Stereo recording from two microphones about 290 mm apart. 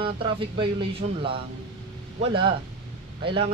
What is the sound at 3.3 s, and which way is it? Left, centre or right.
Speech, centre.